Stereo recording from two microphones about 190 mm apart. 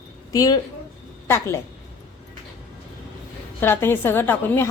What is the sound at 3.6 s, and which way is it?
A woman's voice, 10° left (ahead or behind).